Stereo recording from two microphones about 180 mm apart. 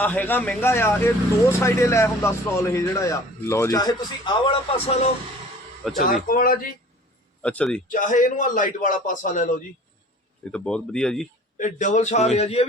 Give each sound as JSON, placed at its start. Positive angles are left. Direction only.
{"t": 0.0, "sound": "speech", "side_deg": 10}
{"t": 5.8, "sound": "speech", "side_deg": 0}
{"t": 6.2, "sound": "a man's voice", "side_deg": 50}
{"t": 7.4, "sound": "speech", "side_deg": 5}
{"t": 7.9, "sound": "a man's voice", "side_deg": 45}
{"t": 10.5, "sound": "speech", "side_deg": 5}
{"t": 11.5, "sound": "a man's voice", "side_deg": 45}